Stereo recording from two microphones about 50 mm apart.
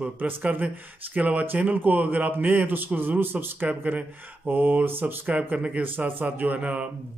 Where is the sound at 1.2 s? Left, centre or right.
Right.